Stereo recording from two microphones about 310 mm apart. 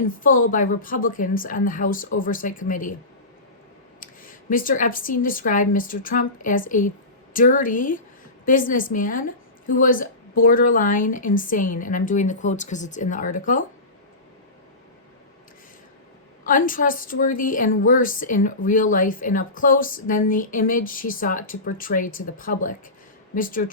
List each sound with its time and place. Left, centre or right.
0.0 s a woman's voice: left
4.0 s a woman's voice: left
16.5 s a woman's voice: left